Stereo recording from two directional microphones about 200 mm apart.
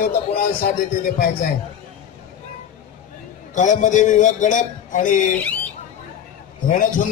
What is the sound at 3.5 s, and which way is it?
A man's voice, 40° left (ahead or behind).